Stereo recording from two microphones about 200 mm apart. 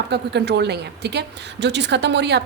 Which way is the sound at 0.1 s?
55° right (ahead or behind).